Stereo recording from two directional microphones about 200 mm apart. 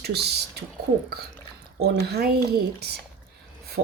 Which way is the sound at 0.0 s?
55° right (ahead or behind).